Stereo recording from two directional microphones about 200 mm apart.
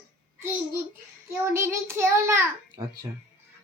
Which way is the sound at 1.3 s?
10° right (ahead or behind).